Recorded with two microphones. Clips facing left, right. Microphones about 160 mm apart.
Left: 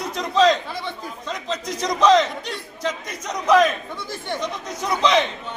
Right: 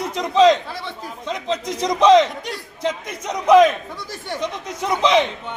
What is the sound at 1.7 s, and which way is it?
Speech, 25° right (ahead or behind).